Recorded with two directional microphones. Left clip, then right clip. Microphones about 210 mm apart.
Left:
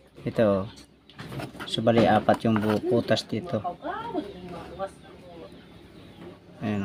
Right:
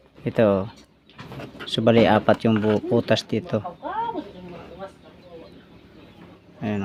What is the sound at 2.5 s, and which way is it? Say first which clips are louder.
Speech: right 4 dB; 5° left (ahead or behind).